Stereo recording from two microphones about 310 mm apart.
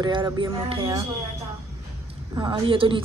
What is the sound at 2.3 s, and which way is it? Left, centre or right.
Speech, centre.